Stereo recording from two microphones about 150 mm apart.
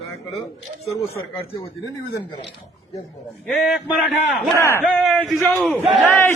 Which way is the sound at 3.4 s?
Centre (ahead or behind).